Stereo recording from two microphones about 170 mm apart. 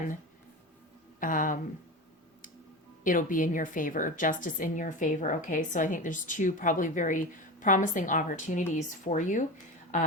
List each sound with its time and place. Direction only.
1.2 s a woman's voice: 50° left (ahead or behind)
3.0 s a woman's voice: 50° left (ahead or behind)